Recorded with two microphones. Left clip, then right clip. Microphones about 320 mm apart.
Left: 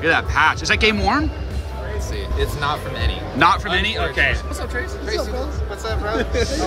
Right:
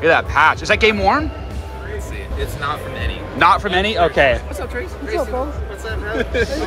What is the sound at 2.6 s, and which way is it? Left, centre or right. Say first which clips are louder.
Speech: right 1 dB; centre.